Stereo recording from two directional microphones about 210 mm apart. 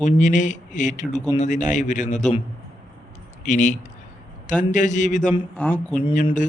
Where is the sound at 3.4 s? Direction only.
35° left (ahead or behind).